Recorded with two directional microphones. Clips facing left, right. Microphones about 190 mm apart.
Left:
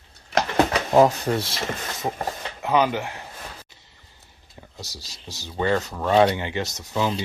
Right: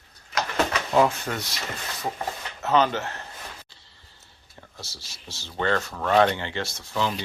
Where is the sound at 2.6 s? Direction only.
10° left (ahead or behind).